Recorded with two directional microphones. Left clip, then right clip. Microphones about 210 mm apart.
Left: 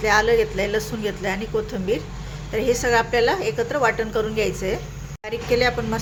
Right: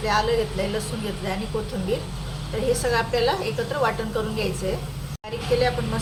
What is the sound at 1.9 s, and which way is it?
A woman's voice, 35° left (ahead or behind).